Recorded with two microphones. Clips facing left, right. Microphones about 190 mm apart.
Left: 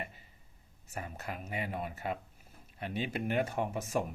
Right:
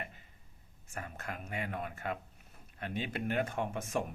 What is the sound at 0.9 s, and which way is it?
Speech, 50° right (ahead or behind).